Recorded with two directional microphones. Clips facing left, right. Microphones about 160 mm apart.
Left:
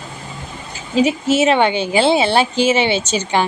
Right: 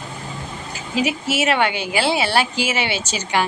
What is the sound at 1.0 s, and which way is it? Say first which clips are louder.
A woman's voice: left 7 dB; 25° left (ahead or behind).